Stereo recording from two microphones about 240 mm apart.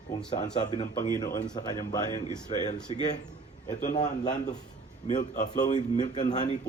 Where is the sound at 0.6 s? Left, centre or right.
Centre.